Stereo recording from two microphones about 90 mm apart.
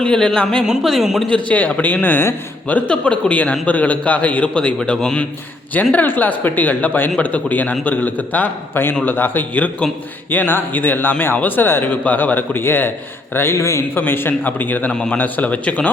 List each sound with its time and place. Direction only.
0.0 s a man's voice: 10° left (ahead or behind)
0.6 s speech: 5° right (ahead or behind)
1.3 s a man's voice: 15° left (ahead or behind)
14.9 s a man's voice: 10° left (ahead or behind)